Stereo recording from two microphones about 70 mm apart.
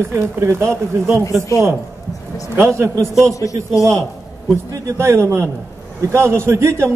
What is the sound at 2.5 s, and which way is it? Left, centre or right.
Speech, right.